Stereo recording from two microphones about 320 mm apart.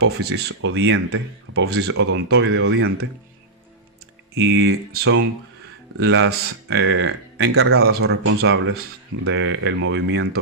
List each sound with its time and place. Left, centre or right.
0.0 s speech: right
4.4 s speech: right